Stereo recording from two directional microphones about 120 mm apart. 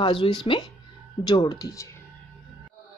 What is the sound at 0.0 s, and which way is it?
Speech, 40° left (ahead or behind).